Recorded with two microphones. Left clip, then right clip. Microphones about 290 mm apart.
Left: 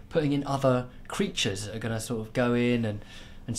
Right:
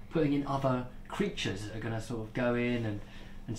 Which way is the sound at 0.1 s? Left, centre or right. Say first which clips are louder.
Left 3 dB; left.